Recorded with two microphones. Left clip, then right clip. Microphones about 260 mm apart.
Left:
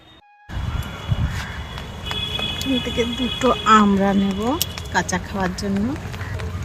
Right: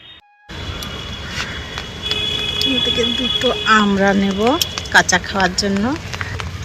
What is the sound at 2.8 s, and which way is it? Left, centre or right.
Speech, centre.